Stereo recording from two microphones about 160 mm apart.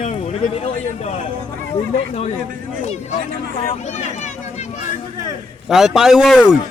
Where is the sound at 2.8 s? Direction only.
45° left (ahead or behind).